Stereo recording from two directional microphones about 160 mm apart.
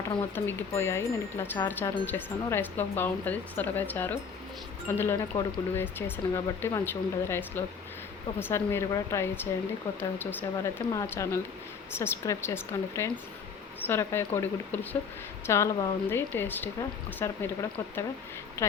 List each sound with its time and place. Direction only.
0.3 s speech: 15° left (ahead or behind)